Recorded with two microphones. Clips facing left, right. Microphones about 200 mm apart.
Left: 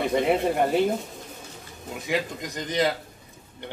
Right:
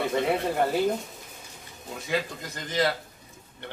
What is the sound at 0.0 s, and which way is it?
Speech, 20° left (ahead or behind).